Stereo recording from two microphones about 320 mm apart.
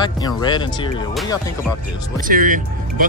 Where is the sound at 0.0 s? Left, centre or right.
Centre.